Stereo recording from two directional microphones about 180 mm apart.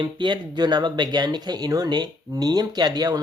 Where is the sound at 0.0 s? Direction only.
25° right (ahead or behind).